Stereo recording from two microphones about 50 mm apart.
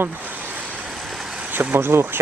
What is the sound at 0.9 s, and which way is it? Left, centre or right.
Vehicle, centre.